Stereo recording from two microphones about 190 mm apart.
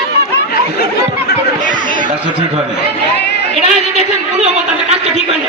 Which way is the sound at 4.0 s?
35° right (ahead or behind).